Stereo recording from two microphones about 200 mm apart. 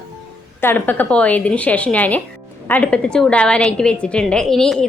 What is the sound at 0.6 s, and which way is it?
A woman's voice, 10° left (ahead or behind).